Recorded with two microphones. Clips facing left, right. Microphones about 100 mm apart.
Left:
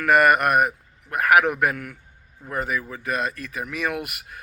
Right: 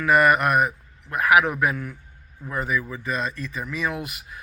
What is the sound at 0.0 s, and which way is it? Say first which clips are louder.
Speech: left 1 dB; 55° left (ahead or behind).